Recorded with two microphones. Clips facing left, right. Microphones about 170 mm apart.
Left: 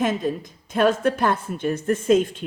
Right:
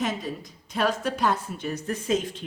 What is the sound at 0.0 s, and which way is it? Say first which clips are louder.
A woman's voice: left 6 dB; 50° left (ahead or behind).